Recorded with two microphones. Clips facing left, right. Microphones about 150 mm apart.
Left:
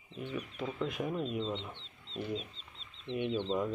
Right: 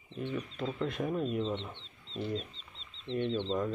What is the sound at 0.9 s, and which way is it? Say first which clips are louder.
Speech: right 2 dB; centre (ahead or behind).